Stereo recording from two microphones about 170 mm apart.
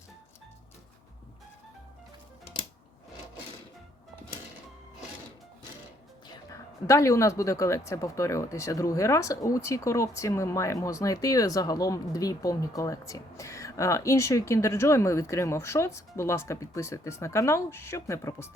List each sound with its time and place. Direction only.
6.2 s speech: 20° left (ahead or behind)